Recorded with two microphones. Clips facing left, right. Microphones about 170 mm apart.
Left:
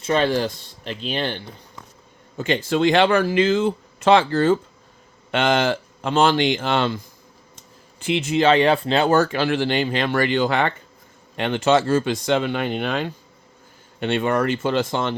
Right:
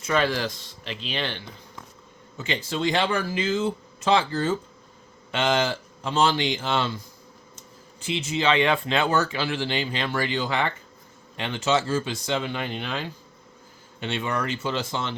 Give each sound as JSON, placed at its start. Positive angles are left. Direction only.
{"t": 0.0, "sound": "speech", "side_deg": 30}
{"t": 0.9, "sound": "speech", "side_deg": 45}
{"t": 2.4, "sound": "speech", "side_deg": 50}
{"t": 5.3, "sound": "speech", "side_deg": 55}
{"t": 8.0, "sound": "speech", "side_deg": 60}